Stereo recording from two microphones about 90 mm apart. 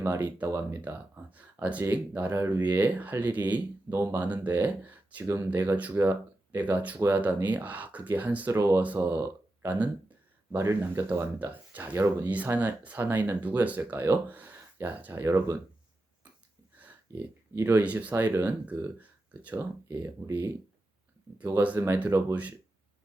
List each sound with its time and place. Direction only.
0.0 s speech: 25° right (ahead or behind)
8.5 s speech: 30° right (ahead or behind)
9.6 s speech: 20° right (ahead or behind)
10.5 s speech: 30° right (ahead or behind)
17.5 s speech: 25° right (ahead or behind)
21.8 s speech: 20° right (ahead or behind)